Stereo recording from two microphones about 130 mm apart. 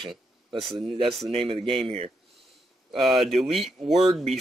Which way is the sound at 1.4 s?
50° right (ahead or behind).